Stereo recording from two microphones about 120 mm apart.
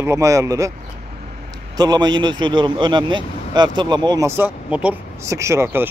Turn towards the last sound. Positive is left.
turn(degrees=-20)  # may be behind; listen again after turning